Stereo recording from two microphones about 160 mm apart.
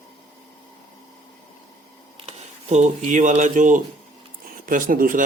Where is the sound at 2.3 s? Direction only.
45° right (ahead or behind).